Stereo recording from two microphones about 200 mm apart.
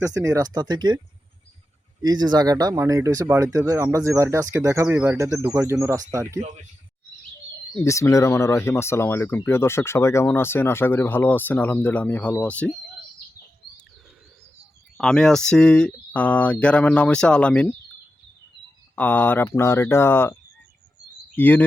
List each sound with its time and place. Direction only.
0.0 s speech: 15° right (ahead or behind)
2.0 s speech: 20° right (ahead or behind)
7.7 s speech: 15° left (ahead or behind)
14.9 s speech: 5° left (ahead or behind)
18.9 s speech: 10° left (ahead or behind)